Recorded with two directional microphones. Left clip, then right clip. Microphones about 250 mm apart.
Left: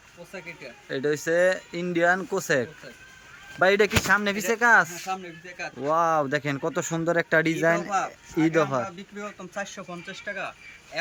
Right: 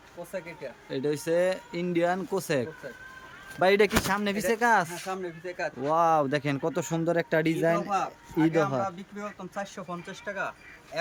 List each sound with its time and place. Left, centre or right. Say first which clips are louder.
0.3 s speech: right 1 dB; centre
5.0 s speech: left 1 dB; centre
5.8 s speech: left 1 dB; centre